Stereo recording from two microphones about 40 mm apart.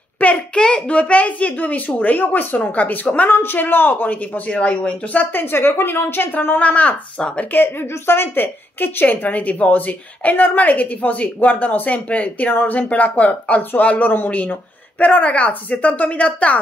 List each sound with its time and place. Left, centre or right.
0.2 s a sound: left
0.6 s speech: left
3.3 s a woman's voice: left
3.5 s speech: left
4.5 s speech: left
5.2 s a woman's voice: left
6.6 s speech: left
7.2 s speech: left
7.5 s a woman's voice: left
8.7 s speech: left